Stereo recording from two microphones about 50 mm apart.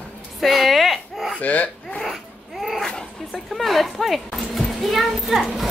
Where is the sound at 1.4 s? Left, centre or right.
Left.